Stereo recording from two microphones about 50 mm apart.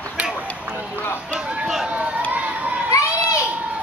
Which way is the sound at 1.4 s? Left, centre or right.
Right.